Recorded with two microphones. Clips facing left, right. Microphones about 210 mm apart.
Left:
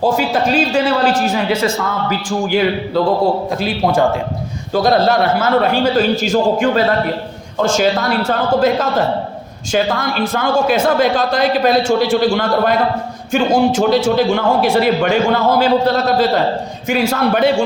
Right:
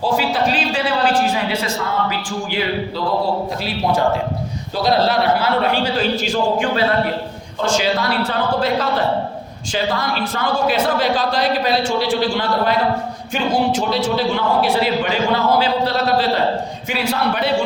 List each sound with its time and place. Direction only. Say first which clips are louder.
0.0 s a man's voice: left 3 dB; 45° left (ahead or behind)
4.7 s a man's voice: left 4 dB; 50° left (ahead or behind)